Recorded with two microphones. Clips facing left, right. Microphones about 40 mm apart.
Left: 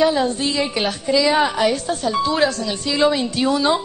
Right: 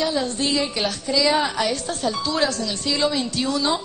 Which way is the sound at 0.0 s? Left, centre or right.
Centre.